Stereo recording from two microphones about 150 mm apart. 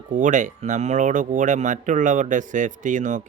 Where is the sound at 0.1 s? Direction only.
55° right (ahead or behind).